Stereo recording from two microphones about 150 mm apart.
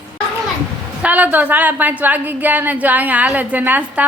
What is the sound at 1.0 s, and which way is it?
A woman's voice, 10° right (ahead or behind).